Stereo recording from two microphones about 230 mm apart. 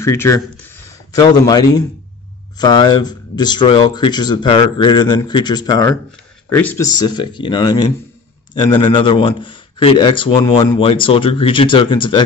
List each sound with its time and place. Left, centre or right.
0.0 s a man's voice: centre